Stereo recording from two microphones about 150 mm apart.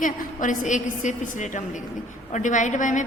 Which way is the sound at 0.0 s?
55° left (ahead or behind).